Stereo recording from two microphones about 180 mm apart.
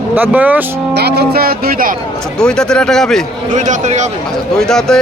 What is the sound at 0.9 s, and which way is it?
Speech, 65° right (ahead or behind).